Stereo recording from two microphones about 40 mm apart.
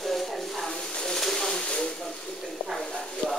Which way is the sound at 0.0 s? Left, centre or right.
Centre.